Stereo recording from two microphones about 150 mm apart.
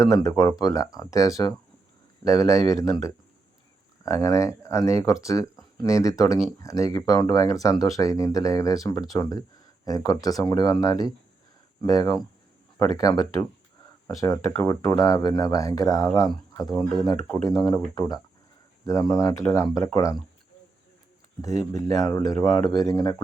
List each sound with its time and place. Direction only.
0.0 s speech: 20° left (ahead or behind)
16.7 s speech: centre (ahead or behind)
17.3 s speech: 25° left (ahead or behind)
21.4 s speech: 25° left (ahead or behind)